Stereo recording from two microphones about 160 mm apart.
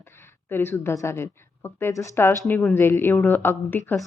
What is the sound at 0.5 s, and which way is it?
Speech, 15° left (ahead or behind).